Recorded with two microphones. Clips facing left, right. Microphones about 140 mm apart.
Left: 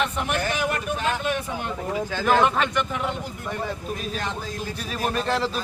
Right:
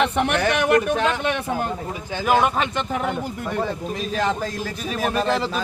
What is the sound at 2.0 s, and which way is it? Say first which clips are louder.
Speech: right 2 dB; 15° right (ahead or behind).